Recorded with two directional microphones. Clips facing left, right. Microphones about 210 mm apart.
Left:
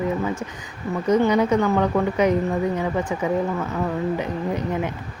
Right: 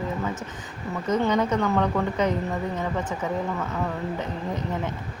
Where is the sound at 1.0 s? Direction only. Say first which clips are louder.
Left 5 dB; 10° left (ahead or behind).